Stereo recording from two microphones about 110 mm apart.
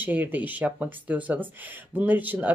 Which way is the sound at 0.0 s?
15° right (ahead or behind).